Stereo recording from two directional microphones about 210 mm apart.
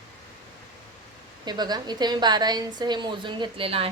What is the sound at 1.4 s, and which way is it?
A woman's voice, 20° right (ahead or behind).